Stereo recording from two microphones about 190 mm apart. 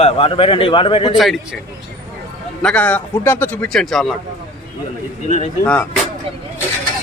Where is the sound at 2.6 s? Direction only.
5° left (ahead or behind).